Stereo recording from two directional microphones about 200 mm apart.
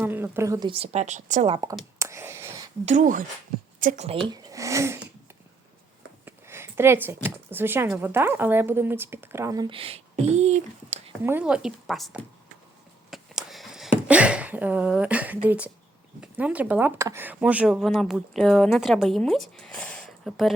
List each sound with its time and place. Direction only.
0.0 s speech: 10° right (ahead or behind)
0.7 s speech: 30° right (ahead or behind)
2.0 s clicking: 15° right (ahead or behind)
2.8 s a woman's voice: 40° right (ahead or behind)
4.3 s speech: 15° right (ahead or behind)
6.2 s a sound: 10° right (ahead or behind)
7.3 s speech: 10° right (ahead or behind); by 11.1 s 35° right (ahead or behind)
11.2 s speech: 10° right (ahead or behind)
13.1 s a sound: centre (ahead or behind)
16.2 s speech: 5° right (ahead or behind)